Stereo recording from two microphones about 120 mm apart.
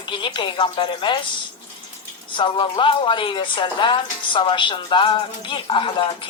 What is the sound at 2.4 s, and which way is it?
A woman's voice, 40° left (ahead or behind).